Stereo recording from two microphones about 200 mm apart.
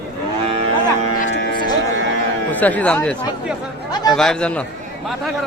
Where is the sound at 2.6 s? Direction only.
10° left (ahead or behind).